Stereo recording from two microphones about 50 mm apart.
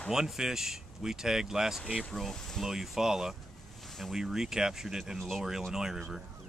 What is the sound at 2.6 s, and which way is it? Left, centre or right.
Speech, centre.